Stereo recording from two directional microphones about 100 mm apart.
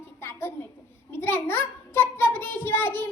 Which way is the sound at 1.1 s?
25° left (ahead or behind).